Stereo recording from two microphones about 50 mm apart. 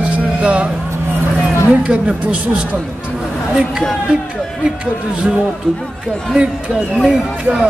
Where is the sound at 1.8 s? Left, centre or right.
Right.